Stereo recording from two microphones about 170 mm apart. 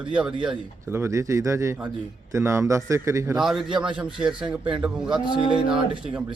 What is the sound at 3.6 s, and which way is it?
Speech, 30° right (ahead or behind).